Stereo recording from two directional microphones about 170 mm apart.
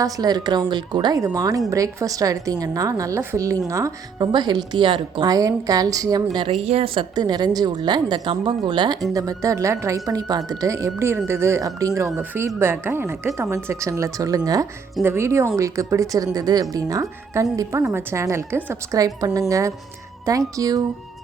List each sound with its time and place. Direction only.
0.0 s a woman's voice: 25° right (ahead or behind)
6.5 s a woman's voice: 40° right (ahead or behind); by 20.8 s 20° right (ahead or behind)